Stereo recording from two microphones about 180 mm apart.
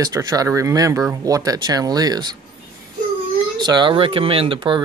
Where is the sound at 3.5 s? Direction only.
25° right (ahead or behind).